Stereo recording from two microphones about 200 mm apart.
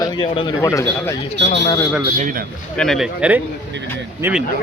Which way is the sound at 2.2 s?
40° right (ahead or behind).